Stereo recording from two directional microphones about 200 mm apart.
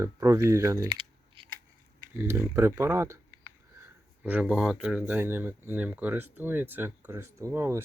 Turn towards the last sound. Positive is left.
turn(degrees=-10)  # may be behind; listen again after turning